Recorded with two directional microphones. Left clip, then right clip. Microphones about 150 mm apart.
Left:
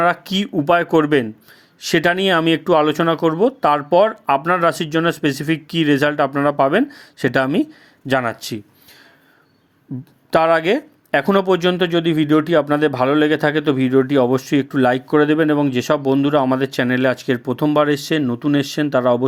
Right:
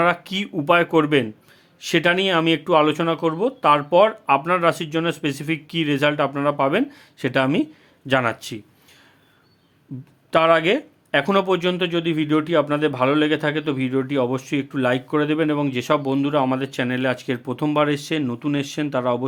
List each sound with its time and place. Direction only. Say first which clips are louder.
0.0 s speech: left 3 dB; 35° left (ahead or behind)
10.3 s speech: left 2 dB; 40° left (ahead or behind)